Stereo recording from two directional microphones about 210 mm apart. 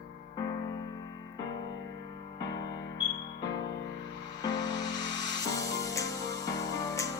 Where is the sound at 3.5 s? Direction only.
15° left (ahead or behind).